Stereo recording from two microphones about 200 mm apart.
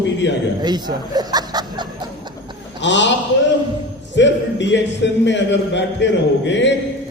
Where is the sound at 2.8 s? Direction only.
65° left (ahead or behind).